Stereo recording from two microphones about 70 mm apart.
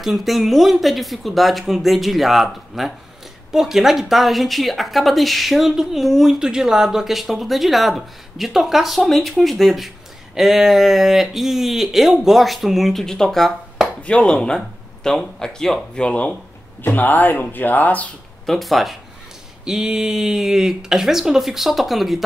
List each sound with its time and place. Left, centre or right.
0.0 s speech: centre
14.0 s speech: centre
18.4 s speech: centre